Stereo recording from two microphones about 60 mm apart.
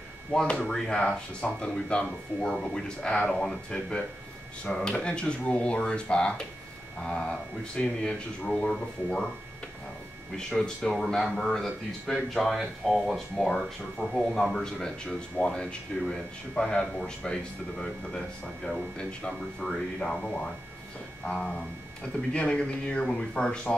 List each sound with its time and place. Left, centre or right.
0.3 s speech: centre
10.6 s speech: centre